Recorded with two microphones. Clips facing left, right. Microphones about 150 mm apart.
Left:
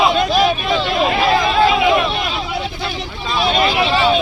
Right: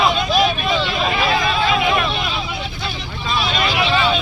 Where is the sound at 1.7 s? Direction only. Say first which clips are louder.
Left 4 dB; 20° left (ahead or behind).